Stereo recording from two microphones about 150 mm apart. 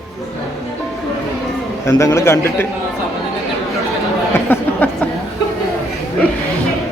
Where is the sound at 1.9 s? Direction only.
20° left (ahead or behind).